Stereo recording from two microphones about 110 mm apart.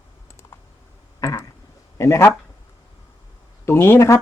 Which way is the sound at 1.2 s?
30° left (ahead or behind).